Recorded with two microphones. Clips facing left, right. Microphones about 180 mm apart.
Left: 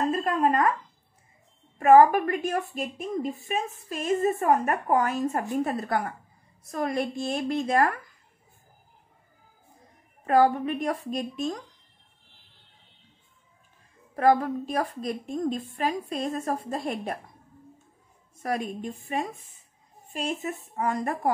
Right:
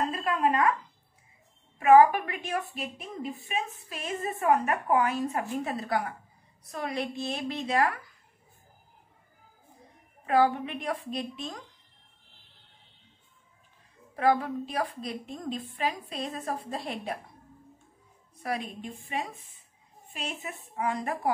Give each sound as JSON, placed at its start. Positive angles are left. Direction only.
{"t": 0.1, "sound": "a sound", "side_deg": 45}
{"t": 1.8, "sound": "a woman's voice", "side_deg": 45}
{"t": 10.2, "sound": "a woman's voice", "side_deg": 45}
{"t": 14.1, "sound": "a woman's voice", "side_deg": 45}
{"t": 18.4, "sound": "a woman's voice", "side_deg": 45}